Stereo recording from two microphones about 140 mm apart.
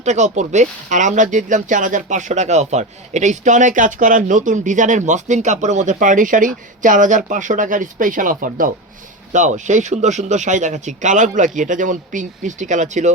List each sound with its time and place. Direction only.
0.0 s speech: 55° right (ahead or behind); by 8.7 s 75° right (ahead or behind)
9.3 s speech: 60° right (ahead or behind)